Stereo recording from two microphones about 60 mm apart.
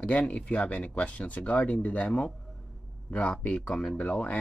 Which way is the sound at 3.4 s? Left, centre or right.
Left.